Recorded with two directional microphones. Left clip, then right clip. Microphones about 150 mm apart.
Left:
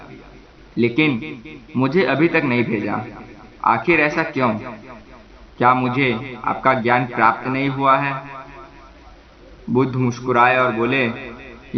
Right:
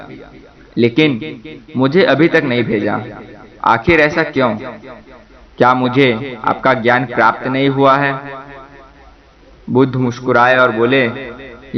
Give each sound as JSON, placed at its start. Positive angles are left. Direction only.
{"t": 0.8, "sound": "a man's voice", "side_deg": -30}
{"t": 5.8, "sound": "a man's voice", "side_deg": -35}
{"t": 9.7, "sound": "a man's voice", "side_deg": -30}